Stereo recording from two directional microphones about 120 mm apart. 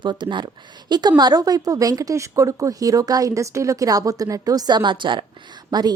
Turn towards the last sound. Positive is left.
turn(degrees=-35)  # may be behind; listen again after turning